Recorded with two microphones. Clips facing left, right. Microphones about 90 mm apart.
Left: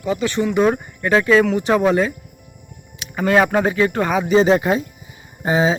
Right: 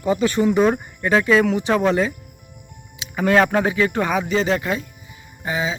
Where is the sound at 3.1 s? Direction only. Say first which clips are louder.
Left 1 dB; 5° left (ahead or behind); by 4.8 s 25° left (ahead or behind).